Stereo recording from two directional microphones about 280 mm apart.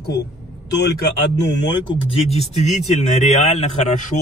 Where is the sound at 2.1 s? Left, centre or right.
Left.